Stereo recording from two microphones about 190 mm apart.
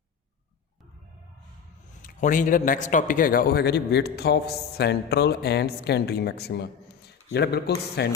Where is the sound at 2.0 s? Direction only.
45° left (ahead or behind).